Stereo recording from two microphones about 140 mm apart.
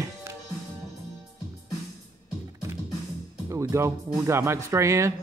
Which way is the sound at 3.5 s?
20° right (ahead or behind).